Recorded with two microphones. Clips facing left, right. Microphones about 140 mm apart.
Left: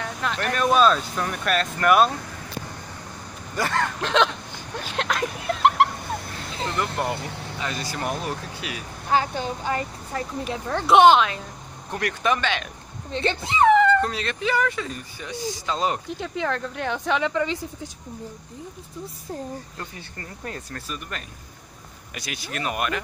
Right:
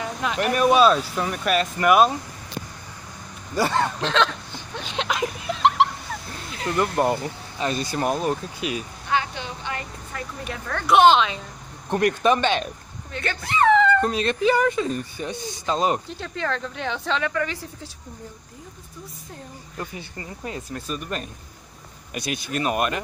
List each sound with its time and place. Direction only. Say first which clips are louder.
0.0 s speech: right 3 dB; 5° right (ahead or behind)
3.5 s speech: right 3 dB; 10° right (ahead or behind)
4.0 s speech: left 3 dB; 10° left (ahead or behind)
4.7 s speech: even; centre (ahead or behind)
6.8 s speech: right 6 dB; 25° right (ahead or behind)
9.1 s a woman's voice: left 3 dB; 40° left (ahead or behind)
10.5 s speech: left 1 dB; 25° left (ahead or behind)
11.9 s speech: right 5 dB; 25° right (ahead or behind)
13.1 s speech: left 2 dB; 25° left (ahead or behind)
14.0 s speech: right 6 dB; 20° right (ahead or behind)
16.1 s speech: left 1 dB; 15° left (ahead or behind)
19.8 s speech: right 3 dB; 15° right (ahead or behind)
20.8 s speech: right 5 dB; 25° right (ahead or behind)